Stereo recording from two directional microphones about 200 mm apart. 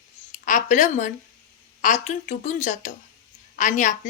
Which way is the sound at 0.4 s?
40° left (ahead or behind).